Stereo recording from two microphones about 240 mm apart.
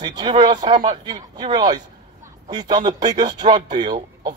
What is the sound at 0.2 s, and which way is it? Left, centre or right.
Speech, centre.